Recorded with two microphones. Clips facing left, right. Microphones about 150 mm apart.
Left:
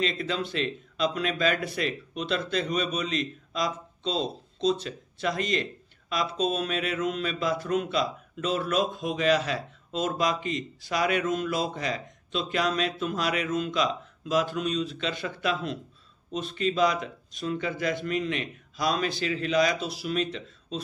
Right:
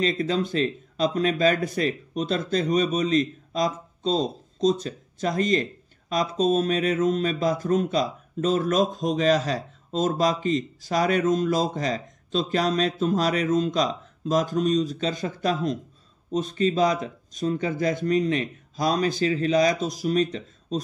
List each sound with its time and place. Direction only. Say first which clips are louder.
0.0 s speech: right 5 dB; 40° right (ahead or behind)